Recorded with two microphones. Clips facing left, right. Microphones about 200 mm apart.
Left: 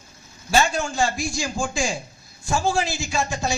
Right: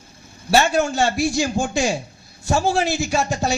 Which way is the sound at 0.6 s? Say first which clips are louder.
Right 5 dB; 65° right (ahead or behind).